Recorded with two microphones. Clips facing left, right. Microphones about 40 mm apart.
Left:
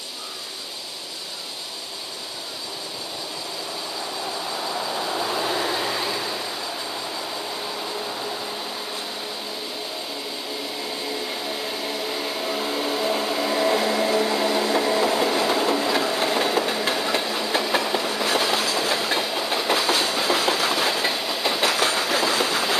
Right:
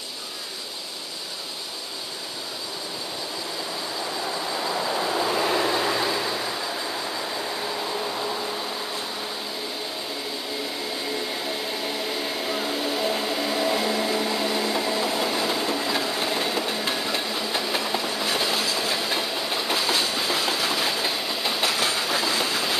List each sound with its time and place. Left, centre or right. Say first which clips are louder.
4.8 s vehicle: right 2 dB; centre
8.0 s a sound: right 1 dB; centre
11.8 s a sound: left 1 dB; centre
12.7 s vehicle: left 3 dB; centre
14.5 s vehicle: left 4 dB; left
15.0 s train: left 4 dB; left
18.2 s train: left 4 dB; left
19.1 s train: left 2 dB; left
19.7 s train: left 3 dB; left